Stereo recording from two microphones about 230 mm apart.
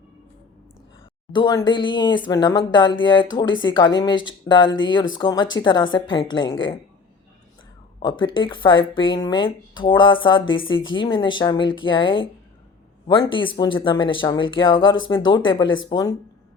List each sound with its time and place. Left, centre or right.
1.3 s speech: centre
7.9 s speech: left